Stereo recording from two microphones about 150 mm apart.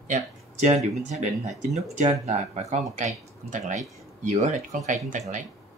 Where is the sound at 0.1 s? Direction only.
50° right (ahead or behind).